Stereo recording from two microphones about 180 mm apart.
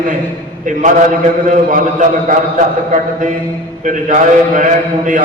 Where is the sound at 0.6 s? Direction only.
45° right (ahead or behind).